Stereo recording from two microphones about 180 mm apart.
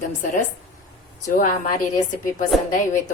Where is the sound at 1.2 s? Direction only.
50° left (ahead or behind).